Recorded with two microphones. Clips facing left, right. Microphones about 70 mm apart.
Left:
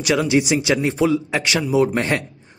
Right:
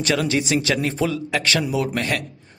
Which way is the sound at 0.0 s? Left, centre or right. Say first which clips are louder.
Left 3 dB; centre.